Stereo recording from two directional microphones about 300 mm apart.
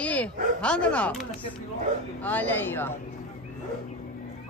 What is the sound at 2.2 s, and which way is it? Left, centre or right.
Speech, centre.